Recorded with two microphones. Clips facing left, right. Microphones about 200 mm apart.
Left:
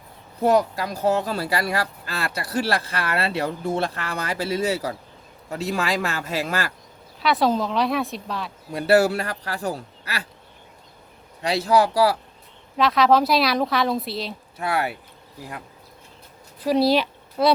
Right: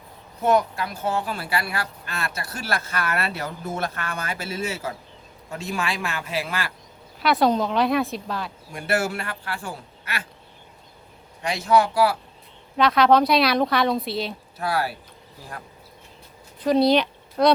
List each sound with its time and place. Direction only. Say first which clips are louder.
0.4 s speech: left 2 dB; 35° left (ahead or behind)
7.2 s speech: right 1 dB; centre (ahead or behind)
8.7 s speech: left 7 dB; 35° left (ahead or behind)
11.4 s speech: left 1 dB; 35° left (ahead or behind)
12.7 s speech: right 1 dB; centre (ahead or behind)
14.6 s speech: left 1 dB; 20° left (ahead or behind)
16.6 s speech: right 1 dB; 5° left (ahead or behind)